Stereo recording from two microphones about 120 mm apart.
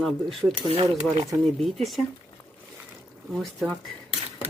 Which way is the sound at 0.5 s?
45° right (ahead or behind).